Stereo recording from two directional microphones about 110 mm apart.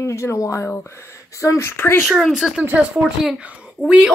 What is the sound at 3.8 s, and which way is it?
Speech, 10° right (ahead or behind).